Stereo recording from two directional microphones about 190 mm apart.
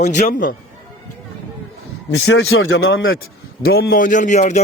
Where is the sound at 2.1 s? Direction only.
80° left.